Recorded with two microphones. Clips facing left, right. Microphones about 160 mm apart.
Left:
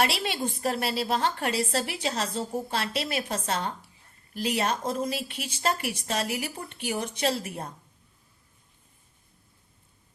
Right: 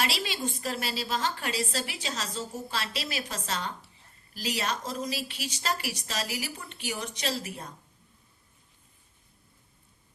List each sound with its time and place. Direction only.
0.0 s a woman's voice: 60° left (ahead or behind)
0.3 s a woman's voice: 30° left (ahead or behind)
0.6 s a woman's voice: 60° left (ahead or behind)